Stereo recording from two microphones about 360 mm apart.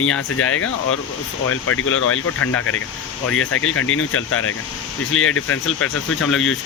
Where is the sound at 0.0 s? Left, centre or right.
Left.